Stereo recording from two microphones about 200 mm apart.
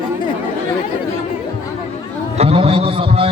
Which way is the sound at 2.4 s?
30° right (ahead or behind).